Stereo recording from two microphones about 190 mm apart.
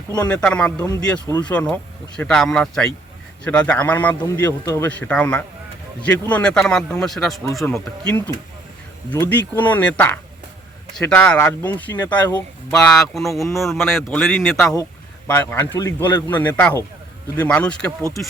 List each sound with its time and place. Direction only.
0.3 s a man's voice: 5° left (ahead or behind)
0.9 s speech: 20° left (ahead or behind)
1.5 s a man's voice: 5° left (ahead or behind)
15.3 s a man's voice: 10° left (ahead or behind)